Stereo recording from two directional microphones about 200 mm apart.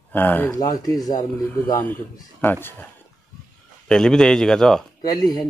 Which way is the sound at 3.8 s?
5° left (ahead or behind).